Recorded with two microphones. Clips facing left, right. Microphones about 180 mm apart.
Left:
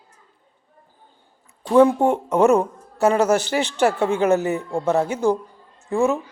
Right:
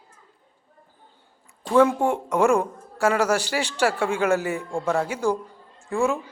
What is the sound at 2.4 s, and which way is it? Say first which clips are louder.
Speech: left 4 dB; 20° left (ahead or behind).